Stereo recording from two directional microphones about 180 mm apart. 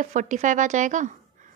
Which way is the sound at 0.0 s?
45° right (ahead or behind).